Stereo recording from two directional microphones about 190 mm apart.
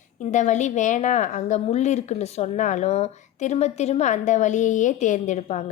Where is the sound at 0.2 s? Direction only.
40° left (ahead or behind).